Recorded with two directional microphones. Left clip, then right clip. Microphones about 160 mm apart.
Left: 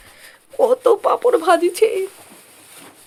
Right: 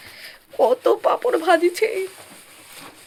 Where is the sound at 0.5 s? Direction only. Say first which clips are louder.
Left 3 dB; 20° left (ahead or behind); by 1.9 s 55° left (ahead or behind).